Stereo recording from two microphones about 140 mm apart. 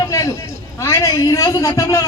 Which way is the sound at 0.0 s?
25° left (ahead or behind).